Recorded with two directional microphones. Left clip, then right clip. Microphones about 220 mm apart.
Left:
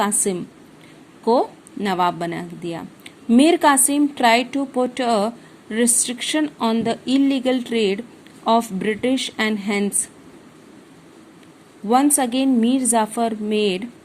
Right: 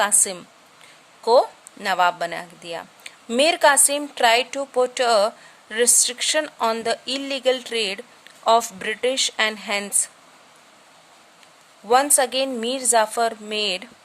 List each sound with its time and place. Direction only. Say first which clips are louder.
0.0 s a woman's voice: even; 15° right (ahead or behind)
12.1 s a woman's voice: left 1 dB; 15° right (ahead or behind)